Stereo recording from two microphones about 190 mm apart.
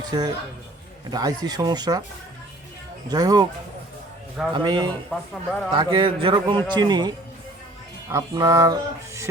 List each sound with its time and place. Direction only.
0.0 s a man's voice: 20° right (ahead or behind)
3.1 s a man's voice: 20° right (ahead or behind)
4.5 s a man's voice: 25° right (ahead or behind)
5.3 s speech: 5° left (ahead or behind)
5.7 s a man's voice: 25° right (ahead or behind)
8.1 s speech: 15° right (ahead or behind)